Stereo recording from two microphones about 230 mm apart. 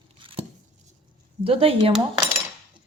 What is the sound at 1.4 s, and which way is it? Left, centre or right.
Speech, right.